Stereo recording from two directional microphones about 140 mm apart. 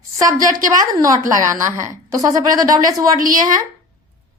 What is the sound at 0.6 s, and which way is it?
A woman's voice, 25° right (ahead or behind).